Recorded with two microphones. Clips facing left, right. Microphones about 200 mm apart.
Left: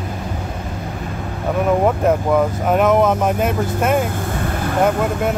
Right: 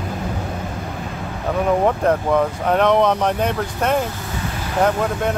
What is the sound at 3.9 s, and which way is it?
Vehicle, 50° left (ahead or behind).